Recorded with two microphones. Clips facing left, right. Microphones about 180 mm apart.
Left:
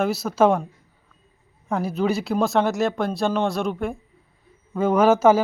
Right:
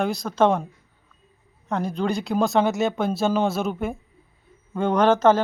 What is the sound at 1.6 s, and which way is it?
Speech, 5° left (ahead or behind).